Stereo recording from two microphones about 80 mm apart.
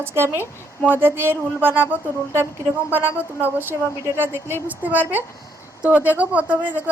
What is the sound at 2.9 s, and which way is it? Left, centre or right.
Speech, right.